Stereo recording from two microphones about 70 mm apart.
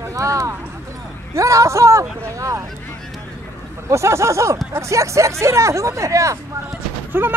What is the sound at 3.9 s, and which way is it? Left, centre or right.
Speech, right.